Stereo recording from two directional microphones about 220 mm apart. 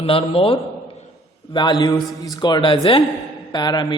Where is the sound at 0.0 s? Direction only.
25° left (ahead or behind).